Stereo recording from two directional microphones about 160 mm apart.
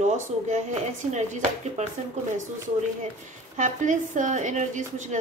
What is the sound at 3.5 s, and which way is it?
Speech, 50° right (ahead or behind).